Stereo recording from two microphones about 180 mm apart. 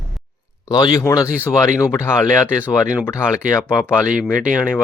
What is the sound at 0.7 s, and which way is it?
Speech, 20° left (ahead or behind).